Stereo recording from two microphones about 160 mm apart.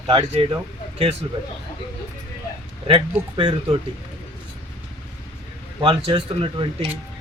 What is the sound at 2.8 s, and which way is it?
Speech, 35° right (ahead or behind).